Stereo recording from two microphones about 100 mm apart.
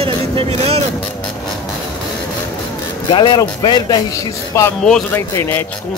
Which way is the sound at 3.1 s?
50° left (ahead or behind).